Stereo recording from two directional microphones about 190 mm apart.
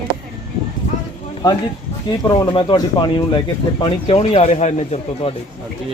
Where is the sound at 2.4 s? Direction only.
20° left (ahead or behind).